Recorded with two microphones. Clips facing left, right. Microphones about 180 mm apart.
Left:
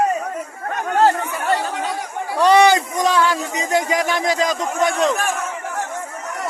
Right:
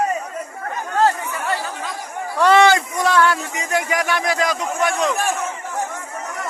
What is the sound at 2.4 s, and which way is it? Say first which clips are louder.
Speech: left 1 dB; 20° left (ahead or behind).